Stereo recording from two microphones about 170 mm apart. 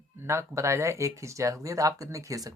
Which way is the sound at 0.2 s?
15° right (ahead or behind).